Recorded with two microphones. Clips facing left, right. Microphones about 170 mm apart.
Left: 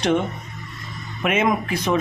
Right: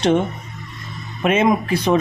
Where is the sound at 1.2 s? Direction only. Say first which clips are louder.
Right 4 dB; 30° right (ahead or behind).